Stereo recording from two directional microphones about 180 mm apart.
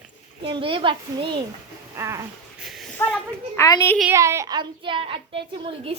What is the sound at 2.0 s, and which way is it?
Speech, 15° right (ahead or behind).